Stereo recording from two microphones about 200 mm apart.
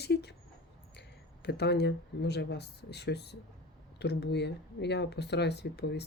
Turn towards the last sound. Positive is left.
turn(degrees=55)  # may be behind; listen again after turning